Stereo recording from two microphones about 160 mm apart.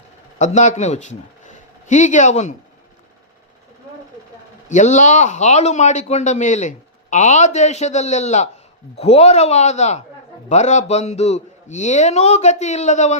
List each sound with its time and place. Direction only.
0.3 s a man's voice: 45° left (ahead or behind)
4.7 s a man's voice: 50° left (ahead or behind)